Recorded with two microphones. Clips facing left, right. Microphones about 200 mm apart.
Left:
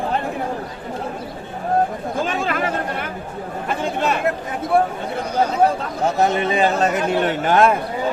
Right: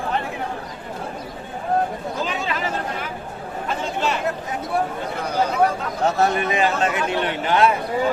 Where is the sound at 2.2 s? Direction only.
50° left (ahead or behind).